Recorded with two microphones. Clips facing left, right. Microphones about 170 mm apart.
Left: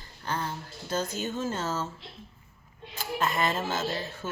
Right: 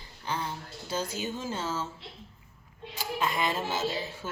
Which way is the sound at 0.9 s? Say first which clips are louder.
Left 2 dB; 10° right (ahead or behind).